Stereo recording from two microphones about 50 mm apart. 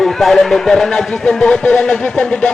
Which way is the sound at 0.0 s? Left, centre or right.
Centre.